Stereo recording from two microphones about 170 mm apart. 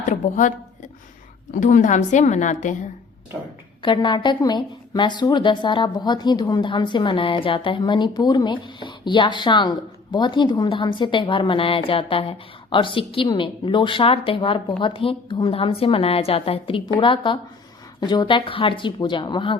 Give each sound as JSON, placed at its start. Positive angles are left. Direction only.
{"t": 0.0, "sound": "a sound", "side_deg": 50}
{"t": 1.5, "sound": "a woman's voice", "side_deg": 50}
{"t": 3.8, "sound": "a woman's voice", "side_deg": 30}